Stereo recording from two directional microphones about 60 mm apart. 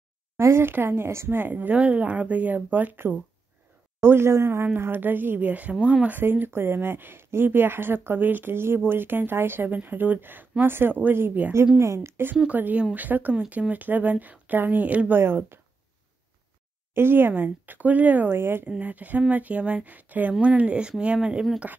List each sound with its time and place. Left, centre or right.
0.4 s speech: right
1.4 s speech: right
4.0 s speech: right
4.7 s speech: right
6.0 s speech: right
11.8 s speech: right
12.4 s speech: right
15.1 s speech: right
16.9 s speech: right
18.7 s speech: right